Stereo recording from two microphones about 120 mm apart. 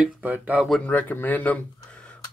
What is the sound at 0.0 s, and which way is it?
Speech, 15° right (ahead or behind).